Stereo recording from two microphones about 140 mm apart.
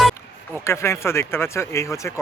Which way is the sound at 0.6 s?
20° left (ahead or behind).